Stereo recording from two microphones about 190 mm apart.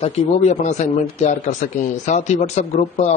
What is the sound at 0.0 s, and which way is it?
Speech, 35° left (ahead or behind).